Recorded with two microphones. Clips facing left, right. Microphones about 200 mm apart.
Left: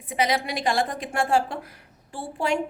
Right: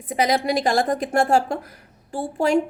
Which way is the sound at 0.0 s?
40° right (ahead or behind).